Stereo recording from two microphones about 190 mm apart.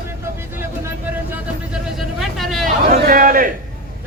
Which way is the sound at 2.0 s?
Centre (ahead or behind).